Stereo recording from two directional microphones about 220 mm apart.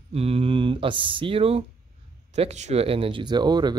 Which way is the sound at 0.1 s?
25° right (ahead or behind).